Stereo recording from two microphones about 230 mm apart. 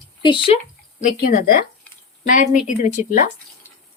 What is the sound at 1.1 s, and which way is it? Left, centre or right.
A woman's voice, left.